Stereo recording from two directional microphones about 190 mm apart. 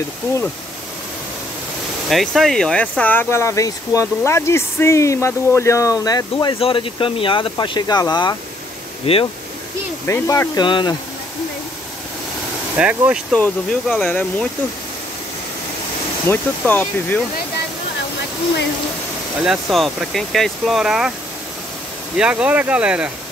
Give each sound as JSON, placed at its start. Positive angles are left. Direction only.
{"t": 2.0, "sound": "speech", "side_deg": 0}
{"t": 10.0, "sound": "speech", "side_deg": 15}
{"t": 12.7, "sound": "speech", "side_deg": -5}
{"t": 13.3, "sound": "speech", "side_deg": 5}
{"t": 16.3, "sound": "speech", "side_deg": 10}
{"t": 19.4, "sound": "speech", "side_deg": 0}
{"t": 22.1, "sound": "speech", "side_deg": -5}